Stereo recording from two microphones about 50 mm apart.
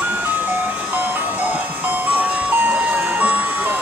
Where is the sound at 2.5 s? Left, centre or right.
Right.